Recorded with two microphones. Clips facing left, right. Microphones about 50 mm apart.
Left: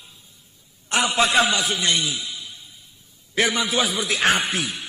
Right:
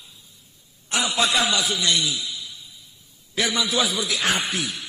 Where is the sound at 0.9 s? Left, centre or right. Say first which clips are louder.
Left 3 dB; left.